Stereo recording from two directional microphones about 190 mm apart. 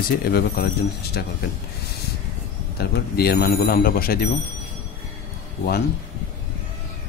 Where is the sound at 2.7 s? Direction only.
55° left (ahead or behind).